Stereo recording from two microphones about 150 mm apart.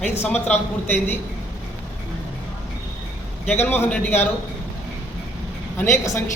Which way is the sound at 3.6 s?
10° left (ahead or behind).